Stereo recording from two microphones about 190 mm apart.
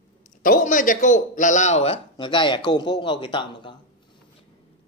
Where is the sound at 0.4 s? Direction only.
45° left (ahead or behind); by 3.7 s 25° left (ahead or behind).